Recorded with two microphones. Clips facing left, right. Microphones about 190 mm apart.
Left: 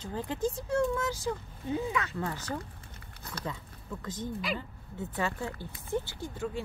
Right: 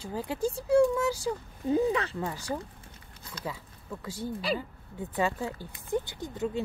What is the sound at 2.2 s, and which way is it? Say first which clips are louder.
Speech: right 2 dB; 15° right (ahead or behind).